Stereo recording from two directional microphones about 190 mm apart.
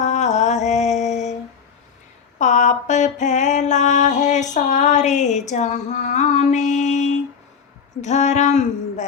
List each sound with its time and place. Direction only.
0.0 s mantra: 35° left (ahead or behind)
2.4 s mantra: 40° left (ahead or behind)
8.0 s a sound: 40° left (ahead or behind)